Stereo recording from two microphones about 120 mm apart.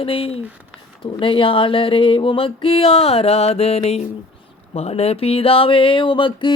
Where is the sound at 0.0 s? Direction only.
50° left (ahead or behind).